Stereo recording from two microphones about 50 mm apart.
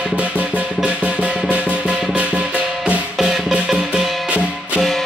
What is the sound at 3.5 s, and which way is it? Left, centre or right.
Music, right.